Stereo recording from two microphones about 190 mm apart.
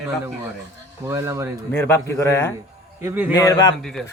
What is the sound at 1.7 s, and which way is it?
Speech, 10° left (ahead or behind).